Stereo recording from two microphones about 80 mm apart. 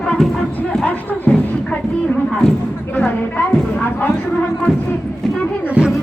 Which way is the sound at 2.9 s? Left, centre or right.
Left.